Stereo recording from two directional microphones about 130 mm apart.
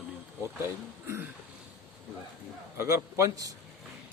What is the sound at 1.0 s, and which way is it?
Throat clearing, 20° right (ahead or behind).